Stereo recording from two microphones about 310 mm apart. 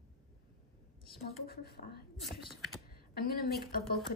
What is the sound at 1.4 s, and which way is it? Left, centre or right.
Speech, left.